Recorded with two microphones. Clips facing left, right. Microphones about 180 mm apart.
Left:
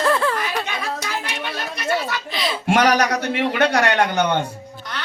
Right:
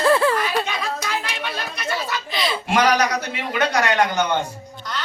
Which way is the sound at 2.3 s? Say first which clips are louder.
Right 1 dB; centre (ahead or behind).